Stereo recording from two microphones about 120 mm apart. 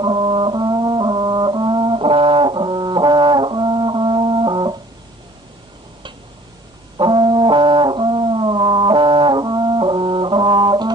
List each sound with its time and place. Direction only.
0.0 s brass instrument: 45° right (ahead or behind)
6.9 s brass instrument: 40° right (ahead or behind)